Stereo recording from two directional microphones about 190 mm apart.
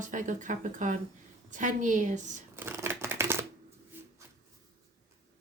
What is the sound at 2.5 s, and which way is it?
Shuffling cards, 10° right (ahead or behind).